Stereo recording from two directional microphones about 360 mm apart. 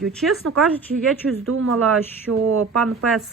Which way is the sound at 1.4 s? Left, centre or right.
Right.